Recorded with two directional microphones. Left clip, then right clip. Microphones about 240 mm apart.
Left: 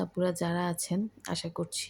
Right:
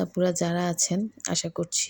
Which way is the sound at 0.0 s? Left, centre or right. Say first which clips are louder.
Right 5 dB; centre.